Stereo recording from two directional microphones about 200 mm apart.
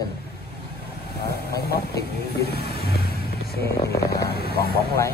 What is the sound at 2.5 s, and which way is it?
Music, 50° left (ahead or behind).